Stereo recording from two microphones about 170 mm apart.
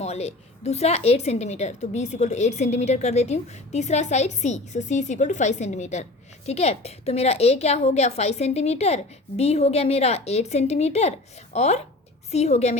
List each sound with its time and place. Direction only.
0.0 s a woman's voice: 40° left (ahead or behind)